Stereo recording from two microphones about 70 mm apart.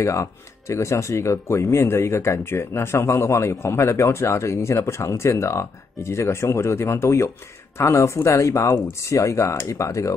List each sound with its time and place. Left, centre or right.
0.0 s speech: left